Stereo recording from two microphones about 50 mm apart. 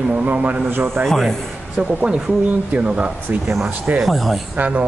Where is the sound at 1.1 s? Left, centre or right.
Centre.